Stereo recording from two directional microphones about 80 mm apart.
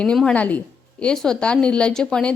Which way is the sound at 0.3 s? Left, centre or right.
Centre.